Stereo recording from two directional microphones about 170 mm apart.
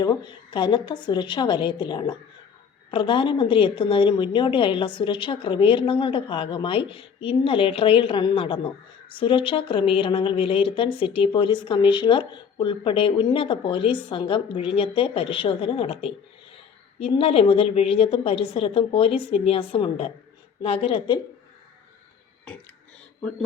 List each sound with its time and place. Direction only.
0.0 s a woman's voice: 25° left (ahead or behind)